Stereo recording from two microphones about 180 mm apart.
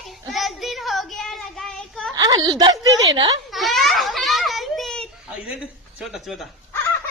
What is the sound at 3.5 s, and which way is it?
Children playing, centre (ahead or behind).